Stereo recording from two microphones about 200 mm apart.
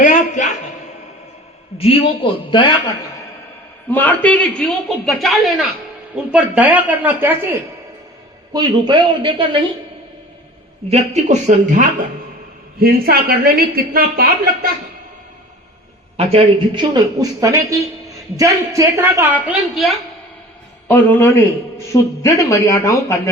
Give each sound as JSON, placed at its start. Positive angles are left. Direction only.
{"t": 0.0, "sound": "a sound", "side_deg": 40}
{"t": 1.8, "sound": "a man's voice", "side_deg": 25}
{"t": 3.9, "sound": "a man's voice", "side_deg": 10}
{"t": 8.5, "sound": "speech", "side_deg": -20}
{"t": 10.8, "sound": "a woman's voice", "side_deg": -30}
{"t": 16.1, "sound": "a woman's voice", "side_deg": -25}
{"t": 20.8, "sound": "a man's voice", "side_deg": 10}